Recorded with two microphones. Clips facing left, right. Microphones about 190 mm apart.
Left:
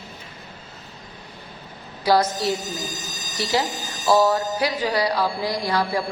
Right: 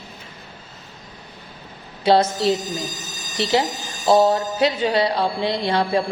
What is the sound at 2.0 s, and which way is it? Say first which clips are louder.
Speech: right 3 dB; 25° right (ahead or behind).